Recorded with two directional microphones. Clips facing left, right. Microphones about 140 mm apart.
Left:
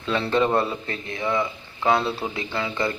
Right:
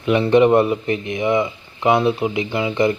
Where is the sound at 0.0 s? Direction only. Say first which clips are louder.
Right 8 dB; 15° right (ahead or behind).